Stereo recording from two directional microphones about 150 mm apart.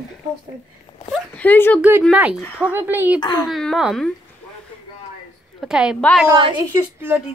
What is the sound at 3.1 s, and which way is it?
Speech, 30° left (ahead or behind).